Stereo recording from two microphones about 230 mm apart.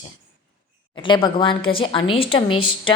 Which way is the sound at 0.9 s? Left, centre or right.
Left.